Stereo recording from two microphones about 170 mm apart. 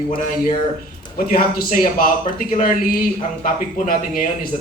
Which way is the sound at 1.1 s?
55° left (ahead or behind).